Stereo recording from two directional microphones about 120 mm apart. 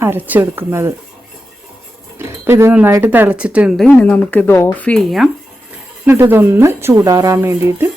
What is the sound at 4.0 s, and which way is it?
Speech, 10° left (ahead or behind).